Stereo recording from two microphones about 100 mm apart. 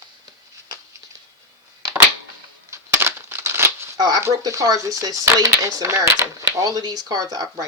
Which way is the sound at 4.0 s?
40° right (ahead or behind).